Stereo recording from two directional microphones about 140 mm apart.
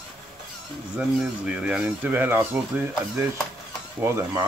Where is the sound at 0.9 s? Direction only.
5° right (ahead or behind).